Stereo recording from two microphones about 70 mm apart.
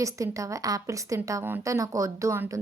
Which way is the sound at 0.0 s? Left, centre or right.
Right.